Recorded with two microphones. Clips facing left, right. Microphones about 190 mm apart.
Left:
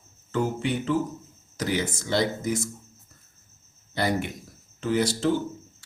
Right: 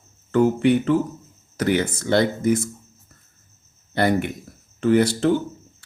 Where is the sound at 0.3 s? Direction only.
60° right (ahead or behind).